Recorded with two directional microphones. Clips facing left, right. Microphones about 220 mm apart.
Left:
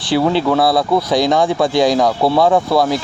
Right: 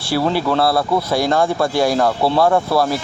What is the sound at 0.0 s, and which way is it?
Speech, 15° left (ahead or behind).